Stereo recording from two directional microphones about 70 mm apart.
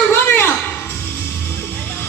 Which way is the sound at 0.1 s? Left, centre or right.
Left.